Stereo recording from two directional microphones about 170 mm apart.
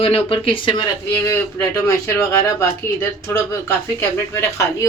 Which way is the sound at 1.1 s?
15° left (ahead or behind).